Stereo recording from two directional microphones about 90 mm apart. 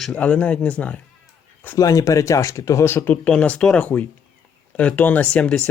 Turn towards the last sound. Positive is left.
turn(degrees=10)  # may be behind; listen again after turning